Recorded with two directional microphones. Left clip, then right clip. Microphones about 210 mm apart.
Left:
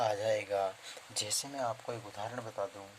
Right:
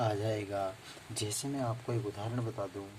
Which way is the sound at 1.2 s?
40° left (ahead or behind).